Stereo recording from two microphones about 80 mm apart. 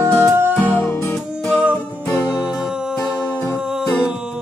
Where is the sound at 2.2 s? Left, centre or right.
Centre.